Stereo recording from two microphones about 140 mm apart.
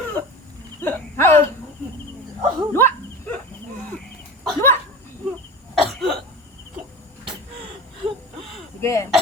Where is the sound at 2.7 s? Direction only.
15° left (ahead or behind).